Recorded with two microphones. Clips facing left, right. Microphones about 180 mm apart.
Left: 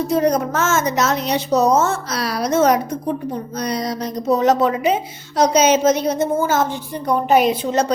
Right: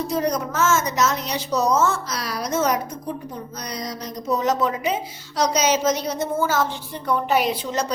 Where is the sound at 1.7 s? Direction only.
50° left (ahead or behind).